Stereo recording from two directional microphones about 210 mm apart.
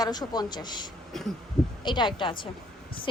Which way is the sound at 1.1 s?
Centre (ahead or behind).